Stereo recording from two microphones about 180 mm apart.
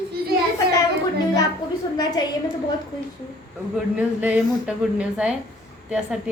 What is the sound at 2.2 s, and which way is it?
Speech, 25° left (ahead or behind).